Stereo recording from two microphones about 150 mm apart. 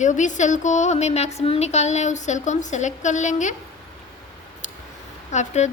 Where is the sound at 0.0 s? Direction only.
55° left (ahead or behind).